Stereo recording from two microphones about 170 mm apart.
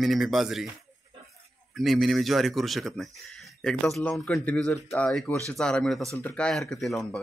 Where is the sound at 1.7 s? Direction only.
Centre (ahead or behind).